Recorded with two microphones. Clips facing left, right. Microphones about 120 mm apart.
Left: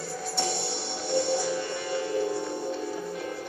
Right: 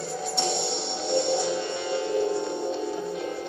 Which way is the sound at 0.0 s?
25° right (ahead or behind).